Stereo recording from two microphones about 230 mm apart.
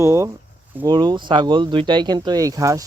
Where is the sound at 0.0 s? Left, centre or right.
Centre.